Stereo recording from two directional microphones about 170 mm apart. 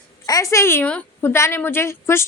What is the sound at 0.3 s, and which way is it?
A woman's voice, 20° left (ahead or behind).